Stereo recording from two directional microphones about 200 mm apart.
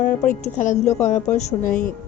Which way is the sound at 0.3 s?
40° left (ahead or behind).